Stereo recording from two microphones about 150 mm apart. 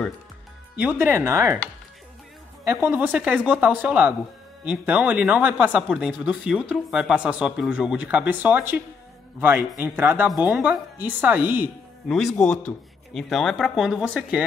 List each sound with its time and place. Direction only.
0.7 s speech: 10° right (ahead or behind)
2.6 s speech: 15° right (ahead or behind)
12.1 s speech: centre (ahead or behind)